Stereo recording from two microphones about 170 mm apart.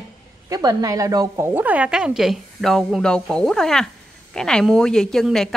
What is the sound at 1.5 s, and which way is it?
A woman's voice, 10° right (ahead or behind).